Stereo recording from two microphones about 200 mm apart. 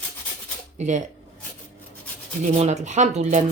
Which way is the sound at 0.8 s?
35° right (ahead or behind).